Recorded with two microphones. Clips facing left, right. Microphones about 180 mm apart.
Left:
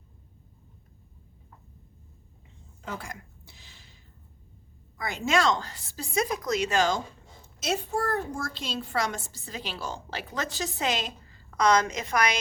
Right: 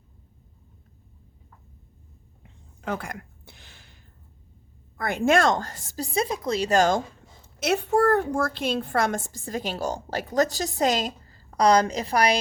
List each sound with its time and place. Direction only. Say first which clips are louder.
2.8 s a sound: right 7 dB; 60° right (ahead or behind)
4.9 s a child's voice: right 5 dB; 55° right (ahead or behind)
7.6 s a child's voice: right 8 dB; 65° right (ahead or behind); by 12.4 s 35° right (ahead or behind)